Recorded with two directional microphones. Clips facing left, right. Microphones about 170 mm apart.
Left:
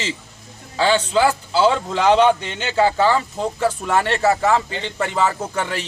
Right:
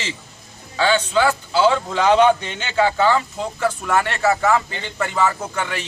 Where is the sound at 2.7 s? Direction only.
35° left (ahead or behind).